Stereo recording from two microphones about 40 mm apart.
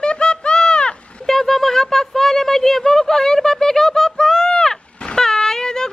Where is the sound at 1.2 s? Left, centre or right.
Centre.